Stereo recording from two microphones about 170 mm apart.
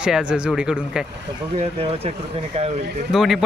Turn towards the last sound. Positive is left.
turn(degrees=0)  # may be behind; listen again after turning